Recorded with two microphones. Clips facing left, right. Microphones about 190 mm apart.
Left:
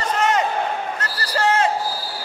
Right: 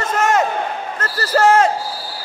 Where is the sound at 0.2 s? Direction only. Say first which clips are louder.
Right 4 dB; 45° right (ahead or behind).